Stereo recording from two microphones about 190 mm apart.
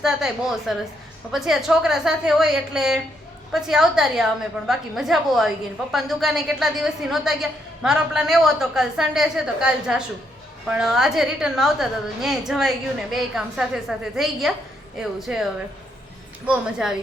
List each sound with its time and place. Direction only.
0.0 s a woman's voice: centre (ahead or behind)
16.5 s a woman's voice: 5° right (ahead or behind)